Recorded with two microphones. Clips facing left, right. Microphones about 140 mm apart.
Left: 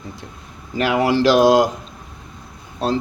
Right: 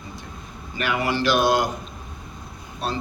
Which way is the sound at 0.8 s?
90° left.